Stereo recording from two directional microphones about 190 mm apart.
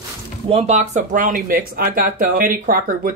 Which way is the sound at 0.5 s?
35° right (ahead or behind).